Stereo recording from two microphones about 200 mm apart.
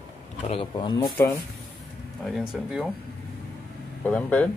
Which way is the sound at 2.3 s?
Centre (ahead or behind).